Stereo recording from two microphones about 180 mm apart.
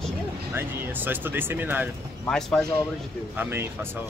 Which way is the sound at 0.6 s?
10° right (ahead or behind).